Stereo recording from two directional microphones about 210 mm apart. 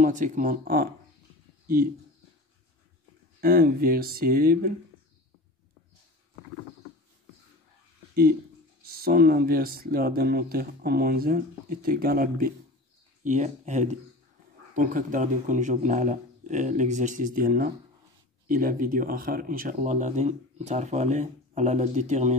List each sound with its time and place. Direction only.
0.0 s speech: 40° right (ahead or behind)
3.3 s speech: 45° right (ahead or behind)
8.9 s speech: 45° right (ahead or behind)